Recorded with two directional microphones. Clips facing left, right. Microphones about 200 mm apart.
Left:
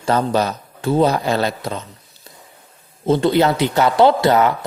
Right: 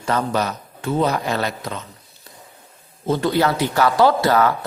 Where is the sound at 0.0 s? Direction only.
30° left (ahead or behind).